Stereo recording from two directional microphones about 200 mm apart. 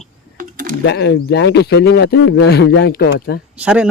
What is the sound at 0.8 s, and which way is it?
Speech, 55° left (ahead or behind).